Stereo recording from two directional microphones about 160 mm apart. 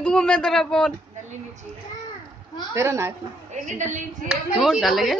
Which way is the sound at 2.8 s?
15° right (ahead or behind).